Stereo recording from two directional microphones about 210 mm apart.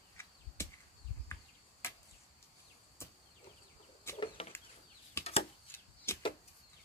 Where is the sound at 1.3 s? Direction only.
10° left (ahead or behind).